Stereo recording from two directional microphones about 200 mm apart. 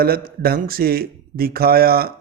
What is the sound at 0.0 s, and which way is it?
Speech, 50° right (ahead or behind).